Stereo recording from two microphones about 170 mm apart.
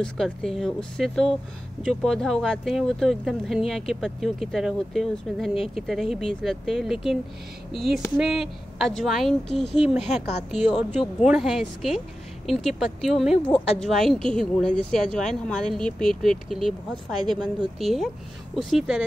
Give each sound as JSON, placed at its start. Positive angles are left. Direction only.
{"t": 0.0, "sound": "speech", "side_deg": 5}